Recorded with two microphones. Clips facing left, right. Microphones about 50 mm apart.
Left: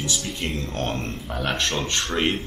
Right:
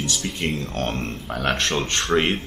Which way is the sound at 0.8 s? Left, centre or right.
Right.